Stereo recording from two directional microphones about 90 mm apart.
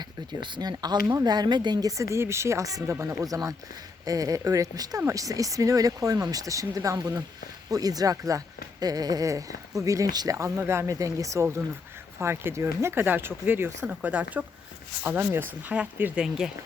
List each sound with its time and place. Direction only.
0.0 s speech: 55° right (ahead or behind)
10.3 s speech: 30° right (ahead or behind)
13.8 s speech: 10° right (ahead or behind)